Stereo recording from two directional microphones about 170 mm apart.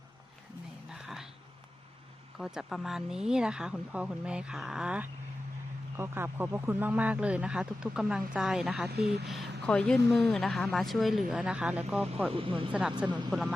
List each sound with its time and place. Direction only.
0.9 s a sound: centre (ahead or behind)
2.4 s a man's voice: centre (ahead or behind)
8.9 s speech: 70° right (ahead or behind)
9.2 s speech: centre (ahead or behind)
12.3 s speech: 30° right (ahead or behind)
13.0 s speech: 5° right (ahead or behind)